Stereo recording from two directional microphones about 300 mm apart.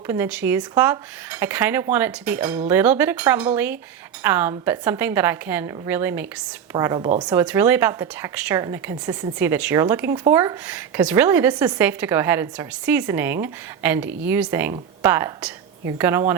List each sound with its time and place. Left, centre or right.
0.1 s speech: centre